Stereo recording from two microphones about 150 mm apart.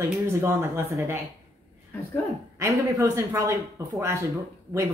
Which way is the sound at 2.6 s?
20° right (ahead or behind).